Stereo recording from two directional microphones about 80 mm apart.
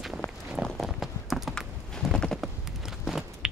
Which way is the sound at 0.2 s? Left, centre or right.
Left.